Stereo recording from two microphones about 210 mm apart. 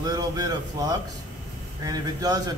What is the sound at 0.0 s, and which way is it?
A man's voice, 20° right (ahead or behind).